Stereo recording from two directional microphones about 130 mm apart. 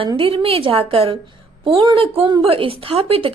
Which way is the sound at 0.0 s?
45° right (ahead or behind).